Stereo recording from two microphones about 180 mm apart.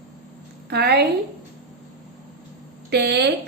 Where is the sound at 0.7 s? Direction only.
65° right (ahead or behind).